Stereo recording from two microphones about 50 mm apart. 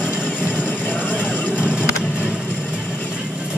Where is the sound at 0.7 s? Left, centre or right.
Left.